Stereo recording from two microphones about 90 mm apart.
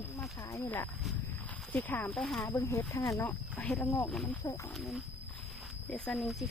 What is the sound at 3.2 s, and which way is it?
Speech, 20° left (ahead or behind).